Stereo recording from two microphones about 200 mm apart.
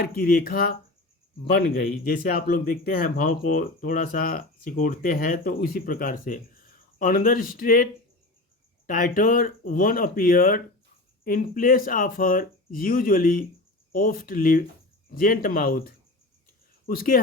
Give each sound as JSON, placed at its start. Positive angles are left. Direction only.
{"t": 0.0, "sound": "a man's voice", "side_deg": 50}
{"t": 8.9, "sound": "a man's voice", "side_deg": 45}